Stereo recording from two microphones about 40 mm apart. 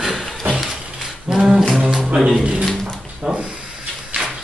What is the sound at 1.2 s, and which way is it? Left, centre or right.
A capella, centre.